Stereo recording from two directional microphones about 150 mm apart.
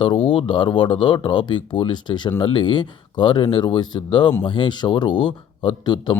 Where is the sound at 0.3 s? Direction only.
35° left (ahead or behind).